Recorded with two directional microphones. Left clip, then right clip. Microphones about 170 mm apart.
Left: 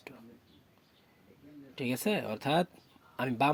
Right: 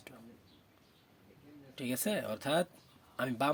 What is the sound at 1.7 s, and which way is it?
Speech, 20° left (ahead or behind).